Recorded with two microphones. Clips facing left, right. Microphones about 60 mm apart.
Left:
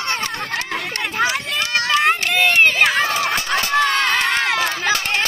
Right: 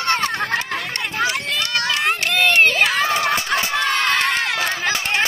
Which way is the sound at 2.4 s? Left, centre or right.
Centre.